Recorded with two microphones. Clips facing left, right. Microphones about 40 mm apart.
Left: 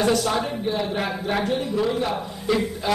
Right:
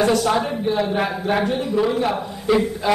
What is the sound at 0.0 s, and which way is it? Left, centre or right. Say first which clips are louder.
A man's voice: right 3 dB; centre.